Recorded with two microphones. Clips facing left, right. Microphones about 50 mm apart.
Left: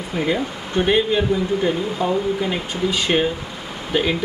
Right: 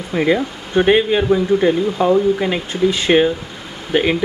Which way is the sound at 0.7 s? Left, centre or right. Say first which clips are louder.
Right 4 dB; right.